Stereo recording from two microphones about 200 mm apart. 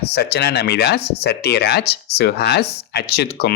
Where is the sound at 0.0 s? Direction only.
55° left (ahead or behind).